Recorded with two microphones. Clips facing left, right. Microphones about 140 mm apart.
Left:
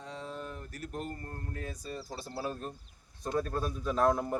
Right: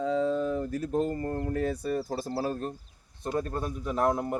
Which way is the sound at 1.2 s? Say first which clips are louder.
Right 12 dB; 90° right.